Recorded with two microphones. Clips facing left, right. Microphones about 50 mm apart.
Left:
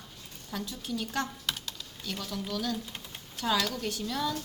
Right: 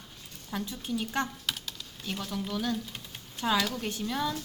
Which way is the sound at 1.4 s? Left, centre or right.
Centre.